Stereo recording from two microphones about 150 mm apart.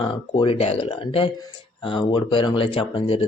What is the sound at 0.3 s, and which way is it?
Speech, 40° left (ahead or behind).